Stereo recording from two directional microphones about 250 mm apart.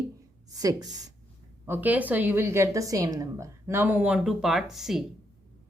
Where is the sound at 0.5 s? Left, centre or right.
Centre.